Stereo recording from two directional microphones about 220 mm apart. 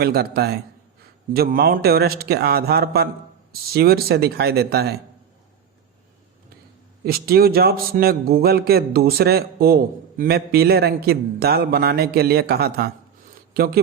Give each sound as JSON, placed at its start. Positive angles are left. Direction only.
{"t": 0.0, "sound": "a man's voice", "side_deg": -45}
{"t": 7.0, "sound": "a man's voice", "side_deg": -45}